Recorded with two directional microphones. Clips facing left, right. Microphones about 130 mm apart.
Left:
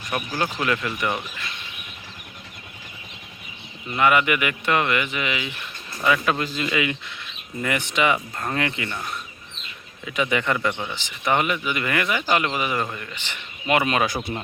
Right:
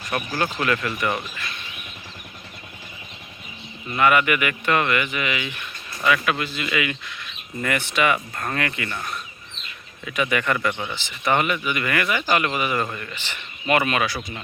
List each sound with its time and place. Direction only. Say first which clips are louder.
0.1 s speech: right 1 dB; 15° left (ahead or behind)
3.9 s speech: right 1 dB; 20° left (ahead or behind)
10.1 s speech: even; 20° left (ahead or behind)
10.7 s speech: even; 5° left (ahead or behind)
10.9 s speech: right 1 dB; 15° left (ahead or behind)
12.8 s speech: right 1 dB; 10° left (ahead or behind); by 14.1 s 25° left (ahead or behind)